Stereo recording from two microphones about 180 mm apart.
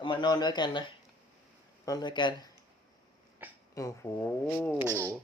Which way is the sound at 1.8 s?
25° left (ahead or behind).